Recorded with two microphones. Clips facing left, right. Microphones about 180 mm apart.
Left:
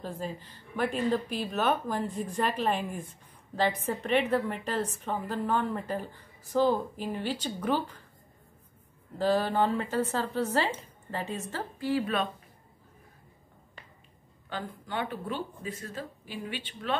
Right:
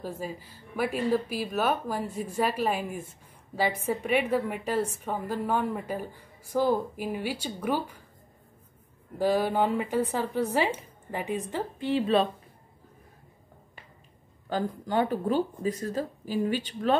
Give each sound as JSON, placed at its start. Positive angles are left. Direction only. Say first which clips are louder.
{"t": 0.0, "sound": "a woman's voice", "louder": "right 1 dB", "side_deg": -10}
{"t": 9.2, "sound": "a woman's voice", "louder": "right 1 dB", "side_deg": -10}
{"t": 14.5, "sound": "speech", "louder": "right 8 dB", "side_deg": -40}